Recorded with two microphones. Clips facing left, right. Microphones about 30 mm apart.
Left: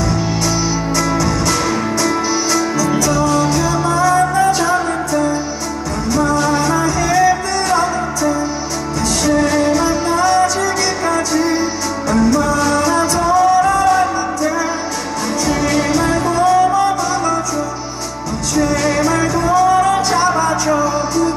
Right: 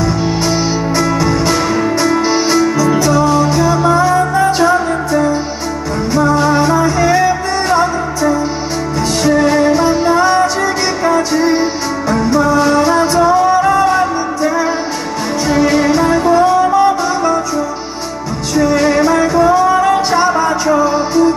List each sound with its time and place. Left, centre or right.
0.0 s music: centre
6.1 s music: centre
18.5 s music: centre
20.8 s music: right